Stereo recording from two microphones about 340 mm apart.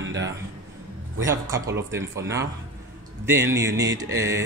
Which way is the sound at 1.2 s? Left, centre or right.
Centre.